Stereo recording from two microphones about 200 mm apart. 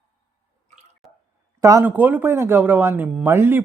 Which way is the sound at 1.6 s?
15° right (ahead or behind).